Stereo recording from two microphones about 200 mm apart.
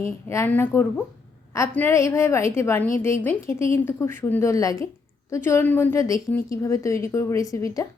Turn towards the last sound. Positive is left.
turn(degrees=15)  # may be behind; listen again after turning